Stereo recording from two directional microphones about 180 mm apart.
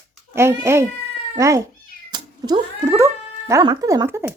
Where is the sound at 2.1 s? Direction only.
25° right (ahead or behind).